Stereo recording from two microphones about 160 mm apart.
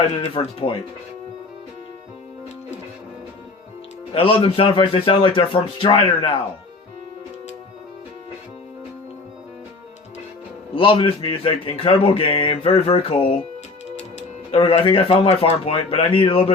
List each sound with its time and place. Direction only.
0.3 s a man's voice: 35° left (ahead or behind)
4.1 s a man's voice: 35° left (ahead or behind)
10.8 s a man's voice: 35° left (ahead or behind)
14.5 s a man's voice: 35° left (ahead or behind)